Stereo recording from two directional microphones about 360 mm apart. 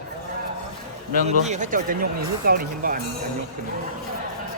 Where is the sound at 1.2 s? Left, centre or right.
Centre.